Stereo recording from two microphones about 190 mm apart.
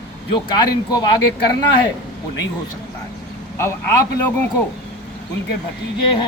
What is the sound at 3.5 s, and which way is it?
Speech, 15° left (ahead or behind).